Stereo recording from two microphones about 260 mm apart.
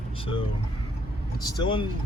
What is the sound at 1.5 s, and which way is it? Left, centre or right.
Speech, centre.